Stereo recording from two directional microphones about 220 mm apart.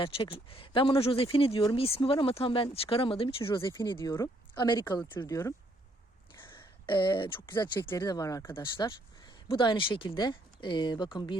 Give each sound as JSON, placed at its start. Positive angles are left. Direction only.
{"t": 0.0, "sound": "speech", "side_deg": 25}